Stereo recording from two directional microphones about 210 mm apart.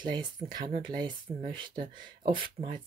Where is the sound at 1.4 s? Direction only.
20° right (ahead or behind).